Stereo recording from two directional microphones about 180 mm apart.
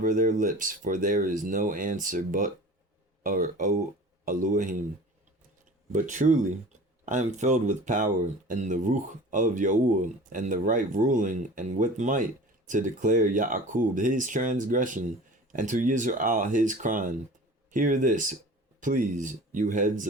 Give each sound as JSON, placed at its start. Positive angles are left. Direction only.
{"t": 0.0, "sound": "speech", "side_deg": -45}
{"t": 5.9, "sound": "speech", "side_deg": -45}